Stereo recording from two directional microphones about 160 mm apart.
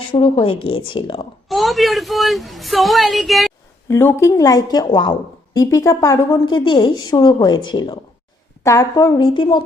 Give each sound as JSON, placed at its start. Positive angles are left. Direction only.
{"t": 0.1, "sound": "speech", "side_deg": 35}
{"t": 1.5, "sound": "a woman's voice", "side_deg": 0}
{"t": 3.8, "sound": "speech", "side_deg": 15}